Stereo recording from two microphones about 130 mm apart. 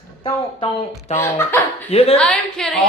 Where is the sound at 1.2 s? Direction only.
20° left (ahead or behind).